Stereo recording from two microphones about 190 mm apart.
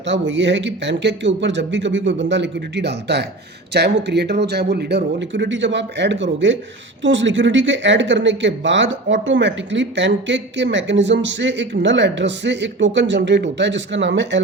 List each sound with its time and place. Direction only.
0.0 s speech: 70° right (ahead or behind)